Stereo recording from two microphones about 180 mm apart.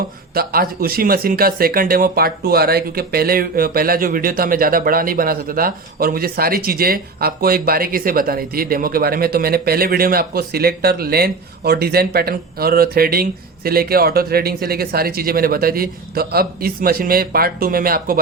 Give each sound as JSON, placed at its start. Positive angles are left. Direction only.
{"t": 0.3, "sound": "speech", "side_deg": -55}